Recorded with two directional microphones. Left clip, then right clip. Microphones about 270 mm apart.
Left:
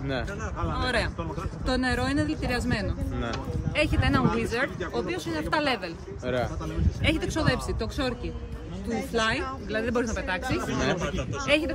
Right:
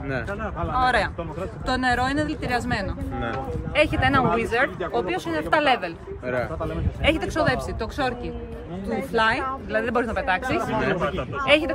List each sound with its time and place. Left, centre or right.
0.7 s a woman's voice: centre
3.7 s speech: centre
7.0 s a woman's voice: centre
9.1 s speech: centre